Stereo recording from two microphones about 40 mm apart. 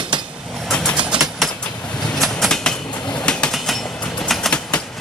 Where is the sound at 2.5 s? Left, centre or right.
Centre.